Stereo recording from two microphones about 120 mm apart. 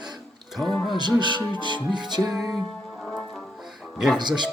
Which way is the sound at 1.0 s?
35° right (ahead or behind).